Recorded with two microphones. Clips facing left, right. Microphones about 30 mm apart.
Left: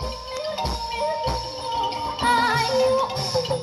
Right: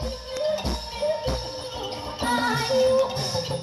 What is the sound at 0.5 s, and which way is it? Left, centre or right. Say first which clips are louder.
Music: left 2 dB; left.